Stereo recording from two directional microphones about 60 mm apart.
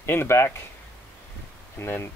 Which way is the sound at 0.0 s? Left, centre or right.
Left.